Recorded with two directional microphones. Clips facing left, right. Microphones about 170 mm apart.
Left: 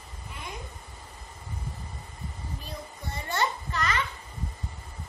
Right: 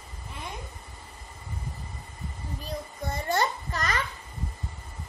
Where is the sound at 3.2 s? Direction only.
40° right (ahead or behind).